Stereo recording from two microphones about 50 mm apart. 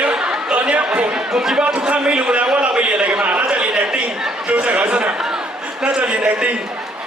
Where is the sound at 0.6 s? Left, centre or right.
Right.